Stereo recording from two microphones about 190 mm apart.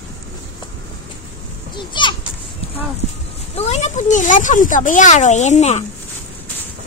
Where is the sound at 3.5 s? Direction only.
35° left (ahead or behind).